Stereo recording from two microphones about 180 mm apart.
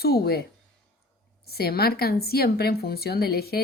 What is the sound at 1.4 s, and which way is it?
A woman's voice, 60° left (ahead or behind).